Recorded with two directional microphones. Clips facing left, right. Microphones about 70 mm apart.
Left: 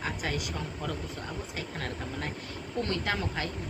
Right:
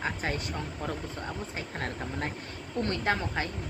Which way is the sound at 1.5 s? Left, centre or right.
Right.